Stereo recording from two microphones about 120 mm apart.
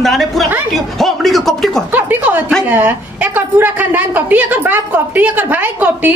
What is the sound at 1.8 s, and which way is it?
A woman's voice, 15° right (ahead or behind).